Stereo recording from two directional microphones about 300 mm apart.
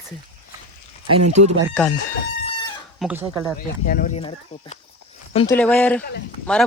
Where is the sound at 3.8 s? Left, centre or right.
Left.